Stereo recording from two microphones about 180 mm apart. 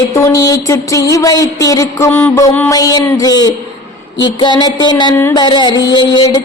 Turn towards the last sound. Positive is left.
turn(degrees=25)  # may be behind; listen again after turning